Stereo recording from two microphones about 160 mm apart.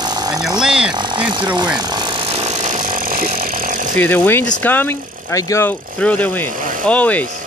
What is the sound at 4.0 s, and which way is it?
Speech, 15° left (ahead or behind).